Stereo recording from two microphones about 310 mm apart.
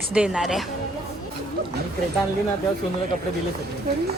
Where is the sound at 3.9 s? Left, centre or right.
Right.